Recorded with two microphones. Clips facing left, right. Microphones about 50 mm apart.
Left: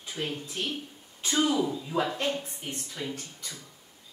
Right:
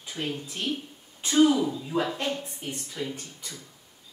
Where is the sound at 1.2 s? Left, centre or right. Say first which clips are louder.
Right 5 dB; centre.